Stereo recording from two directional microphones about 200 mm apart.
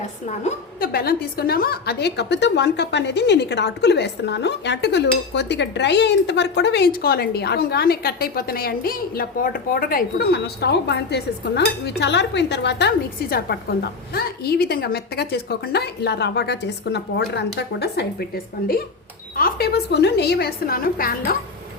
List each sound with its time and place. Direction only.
0.3 s a woman's voice: 35° left (ahead or behind)
0.9 s a woman's voice: 50° left (ahead or behind)
19.4 s a woman's voice: 50° left (ahead or behind)